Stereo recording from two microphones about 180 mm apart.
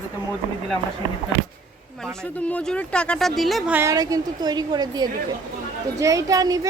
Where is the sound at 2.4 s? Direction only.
5° left (ahead or behind); by 6.7 s 20° right (ahead or behind).